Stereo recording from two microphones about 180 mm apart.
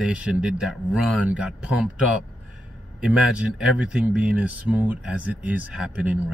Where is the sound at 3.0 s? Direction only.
5° right (ahead or behind).